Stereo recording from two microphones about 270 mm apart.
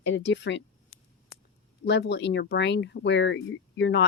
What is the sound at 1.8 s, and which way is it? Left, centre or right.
Speech, left.